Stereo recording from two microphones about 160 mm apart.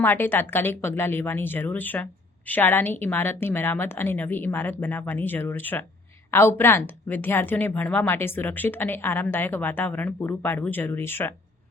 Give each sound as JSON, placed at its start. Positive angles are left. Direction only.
{"t": 0.0, "sound": "a woman's voice", "side_deg": 10}